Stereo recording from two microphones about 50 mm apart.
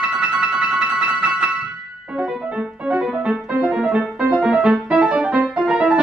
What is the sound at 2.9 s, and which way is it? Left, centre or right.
Music, right.